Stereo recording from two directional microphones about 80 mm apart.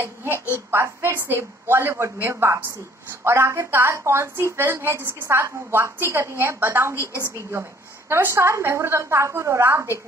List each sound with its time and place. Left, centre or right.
0.7 s a woman's voice: right
8.1 s a woman's voice: right